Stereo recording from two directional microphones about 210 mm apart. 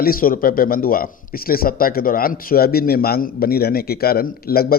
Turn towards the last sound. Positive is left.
turn(degrees=45)  # may be behind; listen again after turning